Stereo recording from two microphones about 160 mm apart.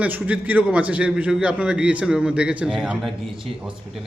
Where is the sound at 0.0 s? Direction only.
10° right (ahead or behind).